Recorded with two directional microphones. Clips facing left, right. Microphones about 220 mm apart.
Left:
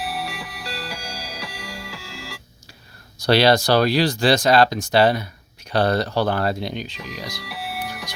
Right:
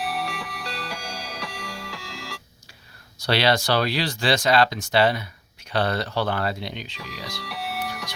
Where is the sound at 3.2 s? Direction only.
40° left (ahead or behind).